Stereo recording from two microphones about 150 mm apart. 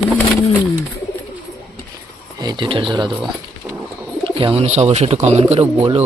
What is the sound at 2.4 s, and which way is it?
Speech, 30° right (ahead or behind).